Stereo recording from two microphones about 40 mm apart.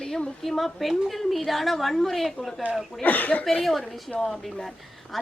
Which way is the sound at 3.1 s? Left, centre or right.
Left.